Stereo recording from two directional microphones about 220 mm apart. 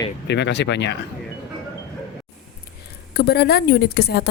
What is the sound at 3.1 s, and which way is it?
Speech, 45° left (ahead or behind).